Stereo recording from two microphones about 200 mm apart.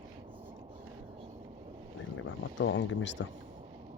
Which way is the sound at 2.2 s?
70° left (ahead or behind).